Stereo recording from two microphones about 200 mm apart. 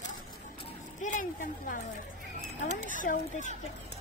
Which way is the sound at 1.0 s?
40° left (ahead or behind).